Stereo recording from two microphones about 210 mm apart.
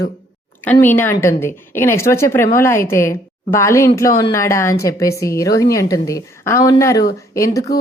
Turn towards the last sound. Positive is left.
turn(degrees=15)  # may be behind; listen again after turning